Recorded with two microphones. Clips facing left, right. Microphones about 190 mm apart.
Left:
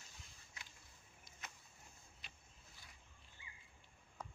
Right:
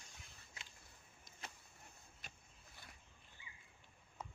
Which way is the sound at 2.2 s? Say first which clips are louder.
Right 2 dB; 50° right (ahead or behind).